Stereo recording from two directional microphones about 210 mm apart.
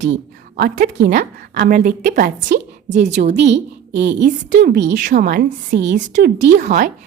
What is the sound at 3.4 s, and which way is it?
A child's voice, 55° right (ahead or behind).